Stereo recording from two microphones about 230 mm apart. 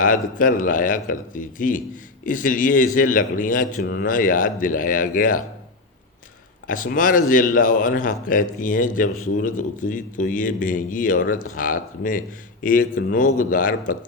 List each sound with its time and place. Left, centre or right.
0.0 s speech: left
6.7 s speech: left